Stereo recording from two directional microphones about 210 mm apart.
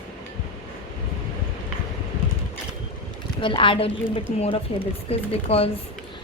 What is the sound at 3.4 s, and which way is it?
A woman's voice, 25° left (ahead or behind).